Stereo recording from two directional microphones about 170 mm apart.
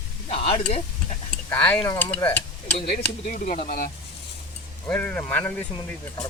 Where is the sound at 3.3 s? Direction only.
50° left (ahead or behind).